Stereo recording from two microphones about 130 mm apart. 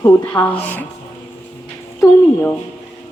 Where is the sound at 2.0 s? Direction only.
15° left (ahead or behind).